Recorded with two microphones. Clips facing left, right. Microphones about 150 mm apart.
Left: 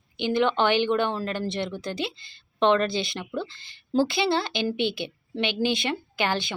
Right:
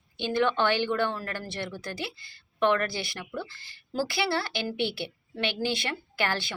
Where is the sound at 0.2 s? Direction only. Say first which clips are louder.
Left 3 dB; 20° left (ahead or behind).